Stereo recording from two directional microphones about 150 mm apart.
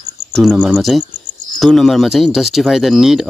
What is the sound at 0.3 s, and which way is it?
Speech, 5° left (ahead or behind).